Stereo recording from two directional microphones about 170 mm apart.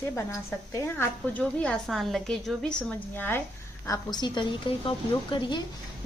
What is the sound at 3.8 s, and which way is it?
A woman's voice, 20° left (ahead or behind).